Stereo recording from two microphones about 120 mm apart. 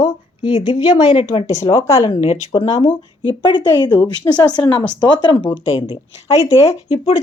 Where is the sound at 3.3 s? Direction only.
45° left (ahead or behind).